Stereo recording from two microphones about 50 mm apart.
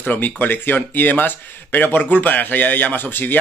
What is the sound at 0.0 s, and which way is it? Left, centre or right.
Speech, left.